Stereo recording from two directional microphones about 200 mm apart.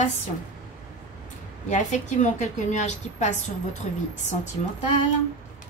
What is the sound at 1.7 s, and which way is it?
A woman's voice, 35° left (ahead or behind).